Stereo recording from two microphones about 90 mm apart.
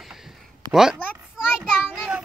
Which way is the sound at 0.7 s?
5° right (ahead or behind).